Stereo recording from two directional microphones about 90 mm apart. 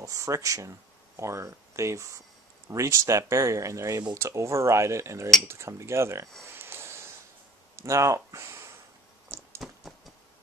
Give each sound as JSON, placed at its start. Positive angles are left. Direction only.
{"t": 0.0, "sound": "speech", "side_deg": -35}
{"t": 6.5, "sound": "sniff", "side_deg": -25}
{"t": 7.7, "sound": "speech", "side_deg": -35}
{"t": 9.6, "sound": "a sound", "side_deg": -5}